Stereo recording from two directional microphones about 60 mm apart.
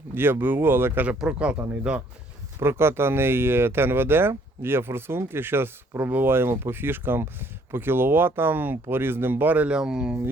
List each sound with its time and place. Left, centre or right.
0.1 s speech: right
1.2 s speech: centre
2.6 s speech: right; by 10.2 s centre